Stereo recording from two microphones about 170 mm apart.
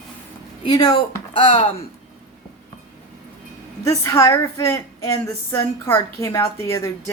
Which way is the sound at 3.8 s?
20° left (ahead or behind).